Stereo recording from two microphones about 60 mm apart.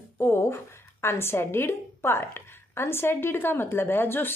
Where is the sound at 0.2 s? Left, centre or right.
Left.